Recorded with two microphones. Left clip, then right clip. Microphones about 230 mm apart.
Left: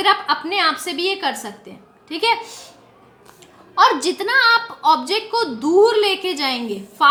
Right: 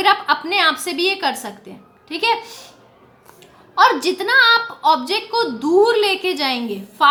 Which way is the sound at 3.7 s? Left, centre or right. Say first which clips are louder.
Right 1 dB; centre.